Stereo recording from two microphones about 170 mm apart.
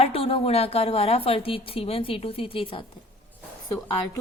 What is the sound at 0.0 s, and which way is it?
A woman's voice, 35° left (ahead or behind).